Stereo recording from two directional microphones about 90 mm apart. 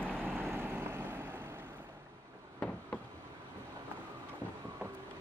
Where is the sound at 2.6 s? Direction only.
10° left (ahead or behind).